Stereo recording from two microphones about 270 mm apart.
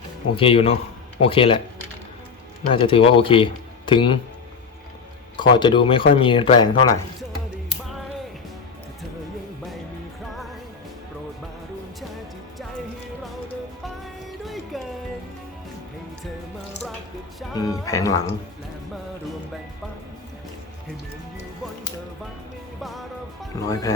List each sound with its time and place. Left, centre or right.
0.3 s speech: centre
2.7 s speech: centre
5.4 s speech: centre
13.8 s music: centre
17.5 s music: centre
22.8 s music: centre
23.6 s music: centre